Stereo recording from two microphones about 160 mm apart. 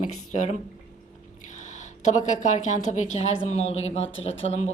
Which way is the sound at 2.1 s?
50° left (ahead or behind).